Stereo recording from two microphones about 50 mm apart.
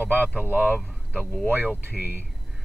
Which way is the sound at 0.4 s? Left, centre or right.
Right.